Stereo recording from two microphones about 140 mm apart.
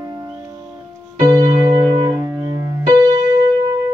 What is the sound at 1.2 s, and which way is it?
Music, 25° right (ahead or behind).